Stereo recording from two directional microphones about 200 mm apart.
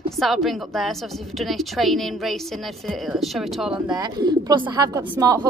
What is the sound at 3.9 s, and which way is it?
A woman's voice, 20° right (ahead or behind).